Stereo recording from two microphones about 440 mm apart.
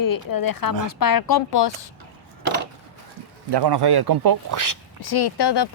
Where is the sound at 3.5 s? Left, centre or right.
Right.